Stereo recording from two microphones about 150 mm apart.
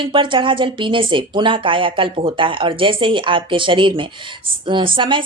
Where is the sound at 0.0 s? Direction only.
35° right (ahead or behind).